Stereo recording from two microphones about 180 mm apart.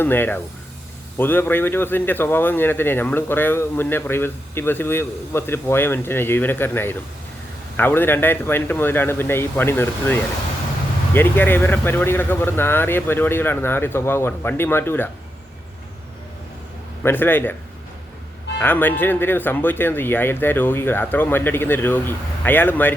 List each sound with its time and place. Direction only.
0.0 s speech: 10° left (ahead or behind)
17.0 s speech: 10° left (ahead or behind)
18.6 s speech: 10° left (ahead or behind)